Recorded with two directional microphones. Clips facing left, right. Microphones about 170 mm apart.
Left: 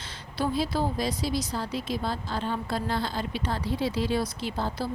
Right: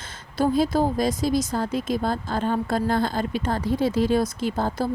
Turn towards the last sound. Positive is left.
turn(degrees=-45)  # may be behind; listen again after turning